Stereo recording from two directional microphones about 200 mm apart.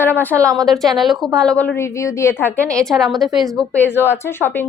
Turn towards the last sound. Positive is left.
turn(degrees=10)  # may be behind; listen again after turning